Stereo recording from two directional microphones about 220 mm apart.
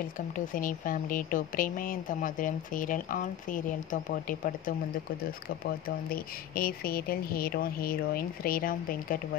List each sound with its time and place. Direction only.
0.3 s speech: 40° left (ahead or behind)
5.9 s speech: 40° left (ahead or behind)